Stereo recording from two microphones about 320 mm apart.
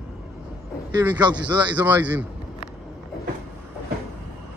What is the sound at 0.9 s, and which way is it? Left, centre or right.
A man's voice, centre.